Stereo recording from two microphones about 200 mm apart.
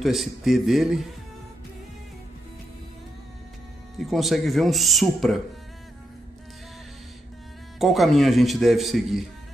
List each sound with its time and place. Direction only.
0.0 s a man's voice: centre (ahead or behind)
4.1 s a man's voice: centre (ahead or behind)
7.8 s a man's voice: centre (ahead or behind)